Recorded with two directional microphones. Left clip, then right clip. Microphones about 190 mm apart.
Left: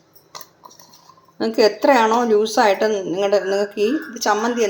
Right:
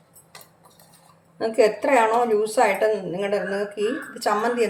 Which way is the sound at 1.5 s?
40° left (ahead or behind).